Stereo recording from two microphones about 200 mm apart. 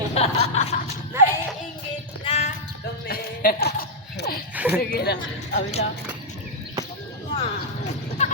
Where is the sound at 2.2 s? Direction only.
30° left (ahead or behind).